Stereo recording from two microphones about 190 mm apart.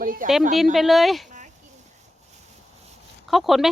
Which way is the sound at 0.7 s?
Centre (ahead or behind).